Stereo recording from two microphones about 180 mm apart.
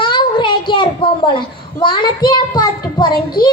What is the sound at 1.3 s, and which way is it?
A child's voice, 25° left (ahead or behind).